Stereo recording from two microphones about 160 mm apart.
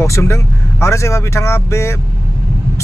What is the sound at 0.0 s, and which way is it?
Speech, 15° left (ahead or behind).